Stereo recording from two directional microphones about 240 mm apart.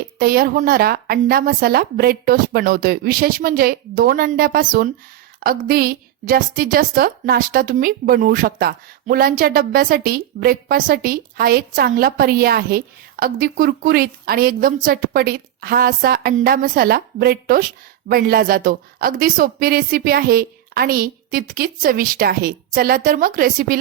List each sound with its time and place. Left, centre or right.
0.2 s a woman's voice: right